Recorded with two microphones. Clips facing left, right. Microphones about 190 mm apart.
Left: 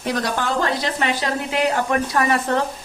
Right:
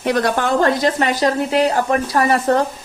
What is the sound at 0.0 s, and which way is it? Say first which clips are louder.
Speech: right 5 dB; 60° right (ahead or behind).